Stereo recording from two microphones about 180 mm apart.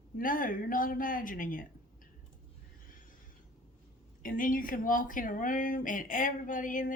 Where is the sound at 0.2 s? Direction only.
50° left (ahead or behind).